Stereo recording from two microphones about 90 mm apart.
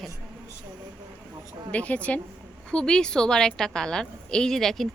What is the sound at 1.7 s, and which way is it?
A woman's voice, 15° left (ahead or behind).